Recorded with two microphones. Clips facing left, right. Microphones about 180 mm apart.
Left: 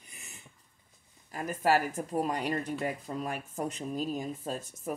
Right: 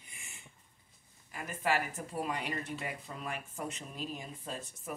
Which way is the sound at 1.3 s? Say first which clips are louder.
Left 6 dB; 40° left (ahead or behind).